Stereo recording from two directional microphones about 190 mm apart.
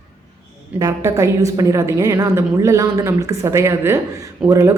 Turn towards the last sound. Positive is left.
turn(degrees=-15)  # may be behind; listen again after turning